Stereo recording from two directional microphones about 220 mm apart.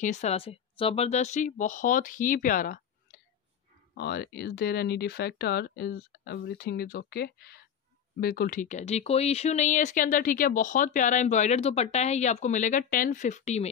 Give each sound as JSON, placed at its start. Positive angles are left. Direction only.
{"t": 0.0, "sound": "speech", "side_deg": 30}